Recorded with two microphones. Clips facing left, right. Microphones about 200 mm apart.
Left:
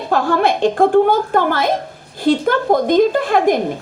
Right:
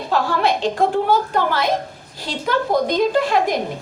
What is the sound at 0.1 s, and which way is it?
A woman's voice, 50° left (ahead or behind).